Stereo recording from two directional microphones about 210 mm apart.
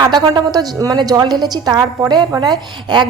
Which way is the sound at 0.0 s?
20° right (ahead or behind).